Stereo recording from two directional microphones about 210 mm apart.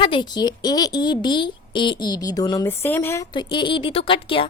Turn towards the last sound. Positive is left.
turn(degrees=25)  # may be behind; listen again after turning